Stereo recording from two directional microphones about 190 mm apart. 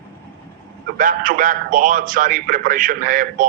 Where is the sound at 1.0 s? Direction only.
45° right (ahead or behind).